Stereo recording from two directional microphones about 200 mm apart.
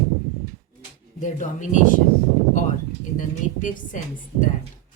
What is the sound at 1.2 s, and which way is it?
Speech, 35° left (ahead or behind).